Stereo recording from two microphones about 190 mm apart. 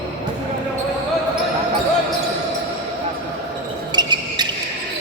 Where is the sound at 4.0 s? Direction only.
20° right (ahead or behind).